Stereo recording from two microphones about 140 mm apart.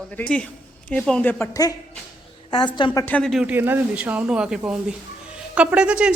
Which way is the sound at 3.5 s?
15° right (ahead or behind).